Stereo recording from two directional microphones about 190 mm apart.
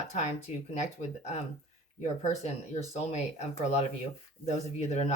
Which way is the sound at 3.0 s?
35° left (ahead or behind).